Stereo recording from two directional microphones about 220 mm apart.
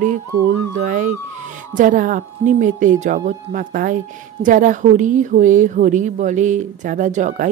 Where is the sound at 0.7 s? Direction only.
35° right (ahead or behind).